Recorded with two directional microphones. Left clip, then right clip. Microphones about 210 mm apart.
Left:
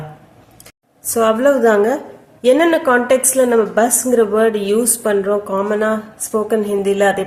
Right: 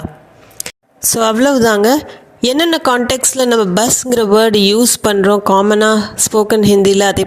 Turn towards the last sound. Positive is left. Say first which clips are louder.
# right 4 dB
turn(degrees=-45)  # may be behind; listen again after turning